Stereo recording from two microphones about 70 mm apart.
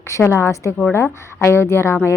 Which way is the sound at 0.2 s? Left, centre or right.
Left.